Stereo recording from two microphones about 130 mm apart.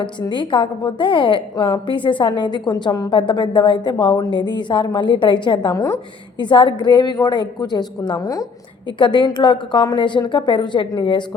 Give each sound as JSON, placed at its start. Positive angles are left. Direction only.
{"t": 0.0, "sound": "a woman's voice", "side_deg": 35}
{"t": 6.4, "sound": "a woman's voice", "side_deg": 40}